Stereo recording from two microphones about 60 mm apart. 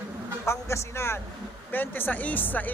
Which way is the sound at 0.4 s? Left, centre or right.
Left.